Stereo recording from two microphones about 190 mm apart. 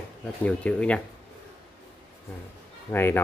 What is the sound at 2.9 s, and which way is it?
Speech, 10° left (ahead or behind).